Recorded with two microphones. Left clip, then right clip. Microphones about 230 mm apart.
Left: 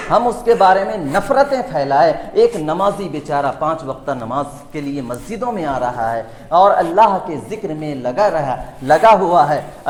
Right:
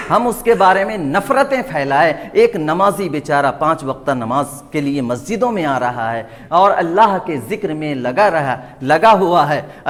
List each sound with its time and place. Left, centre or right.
0.1 s a man's voice: right